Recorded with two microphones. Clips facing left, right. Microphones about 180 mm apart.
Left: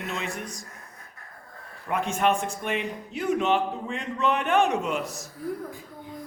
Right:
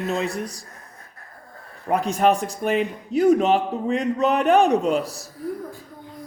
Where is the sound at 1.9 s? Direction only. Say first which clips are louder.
Right 5 dB; 35° right (ahead or behind).